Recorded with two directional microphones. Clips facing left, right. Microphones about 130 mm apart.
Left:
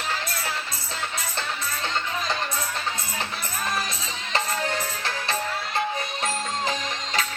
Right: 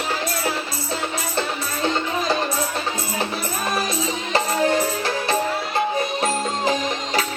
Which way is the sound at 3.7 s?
20° right (ahead or behind).